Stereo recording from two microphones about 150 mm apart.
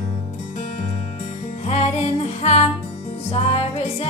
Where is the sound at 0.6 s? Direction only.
55° left (ahead or behind).